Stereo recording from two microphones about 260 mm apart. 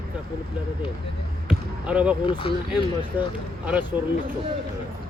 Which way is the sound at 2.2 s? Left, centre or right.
Centre.